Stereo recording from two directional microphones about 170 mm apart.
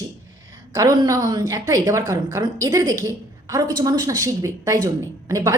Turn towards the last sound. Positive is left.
turn(degrees=-20)  # may be behind; listen again after turning